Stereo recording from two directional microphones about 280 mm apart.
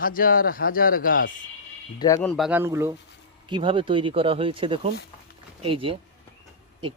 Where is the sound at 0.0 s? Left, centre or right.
Left.